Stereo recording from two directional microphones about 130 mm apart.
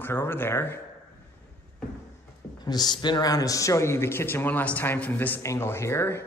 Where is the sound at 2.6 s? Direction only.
30° left (ahead or behind).